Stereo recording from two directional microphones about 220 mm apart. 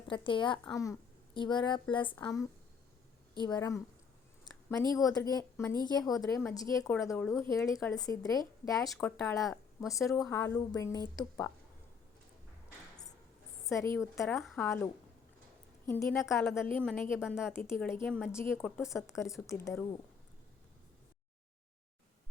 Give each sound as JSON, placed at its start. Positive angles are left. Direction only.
{"t": 0.1, "sound": "a woman's voice", "side_deg": 20}
{"t": 13.9, "sound": "a woman's voice", "side_deg": 10}
{"t": 14.4, "sound": "speech", "side_deg": 0}
{"t": 15.9, "sound": "a woman's voice", "side_deg": 10}
{"t": 16.2, "sound": "speech", "side_deg": 0}
{"t": 17.5, "sound": "a woman's voice", "side_deg": 10}